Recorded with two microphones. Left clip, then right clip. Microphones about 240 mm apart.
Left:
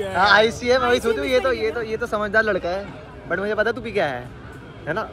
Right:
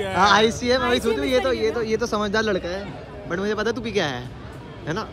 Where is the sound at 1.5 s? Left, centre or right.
Centre.